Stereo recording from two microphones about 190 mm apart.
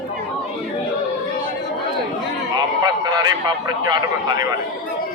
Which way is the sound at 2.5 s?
20° right (ahead or behind).